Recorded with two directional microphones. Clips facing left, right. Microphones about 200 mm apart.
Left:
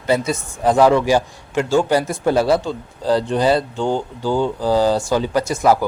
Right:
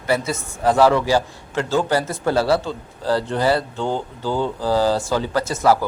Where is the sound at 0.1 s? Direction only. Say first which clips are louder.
Left 3 dB; 15° left (ahead or behind).